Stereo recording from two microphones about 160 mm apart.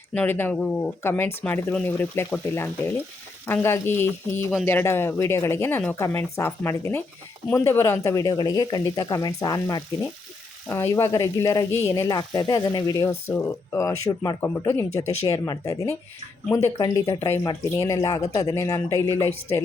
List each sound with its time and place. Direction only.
0.1 s speech: 10° left (ahead or behind)
15.0 s speech: 40° left (ahead or behind)
15.4 s speech: 20° left (ahead or behind)